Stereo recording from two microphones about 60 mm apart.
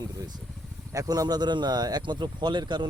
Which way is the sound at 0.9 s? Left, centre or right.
Right.